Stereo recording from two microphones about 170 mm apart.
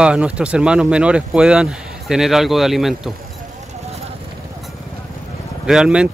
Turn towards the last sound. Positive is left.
turn(degrees=-5)  # may be behind; listen again after turning